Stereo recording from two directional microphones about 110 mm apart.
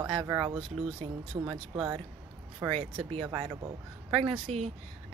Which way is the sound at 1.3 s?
30° right (ahead or behind).